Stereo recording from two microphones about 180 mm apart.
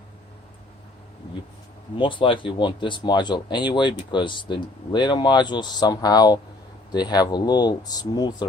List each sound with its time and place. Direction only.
2.0 s speech: 30° left (ahead or behind)